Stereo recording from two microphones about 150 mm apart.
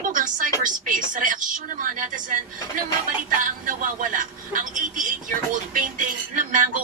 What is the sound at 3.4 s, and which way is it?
A woman's voice, 60° right (ahead or behind).